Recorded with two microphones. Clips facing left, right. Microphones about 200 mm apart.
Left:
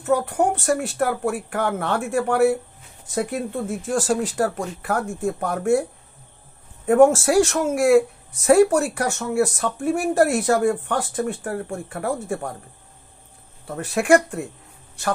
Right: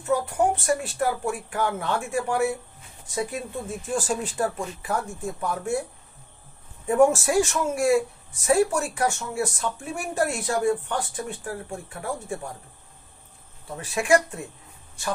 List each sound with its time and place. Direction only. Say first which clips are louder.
0.0 s speech: left 3 dB; 65° left (ahead or behind)
3.9 s speech: left 5 dB; 85° left; by 5.9 s 65° left (ahead or behind)
6.9 s speech: left 5 dB; 75° left (ahead or behind)
13.7 s speech: left 4 dB; 65° left (ahead or behind)